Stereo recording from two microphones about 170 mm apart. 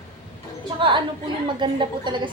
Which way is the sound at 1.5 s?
25° right (ahead or behind).